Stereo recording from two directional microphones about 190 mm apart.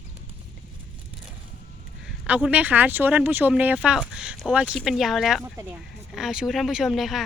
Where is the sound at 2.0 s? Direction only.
5° right (ahead or behind).